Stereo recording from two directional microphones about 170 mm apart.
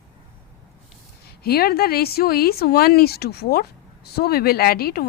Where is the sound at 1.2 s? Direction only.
65° left (ahead or behind).